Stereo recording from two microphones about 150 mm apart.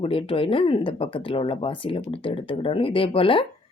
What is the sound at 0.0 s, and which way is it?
Speech, 40° left (ahead or behind).